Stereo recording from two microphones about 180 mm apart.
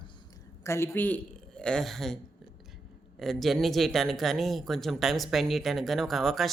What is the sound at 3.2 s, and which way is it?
Speech, centre (ahead or behind).